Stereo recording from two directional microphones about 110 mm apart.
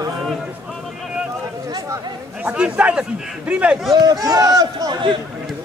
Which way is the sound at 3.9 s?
35° right (ahead or behind).